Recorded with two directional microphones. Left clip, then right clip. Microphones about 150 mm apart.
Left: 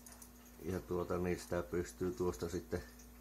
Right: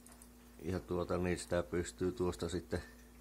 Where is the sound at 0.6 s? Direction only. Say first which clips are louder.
Right 1 dB; 20° right (ahead or behind).